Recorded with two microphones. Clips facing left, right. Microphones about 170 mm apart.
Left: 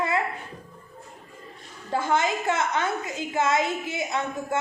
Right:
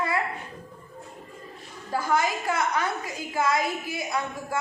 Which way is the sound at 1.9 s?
25° left (ahead or behind).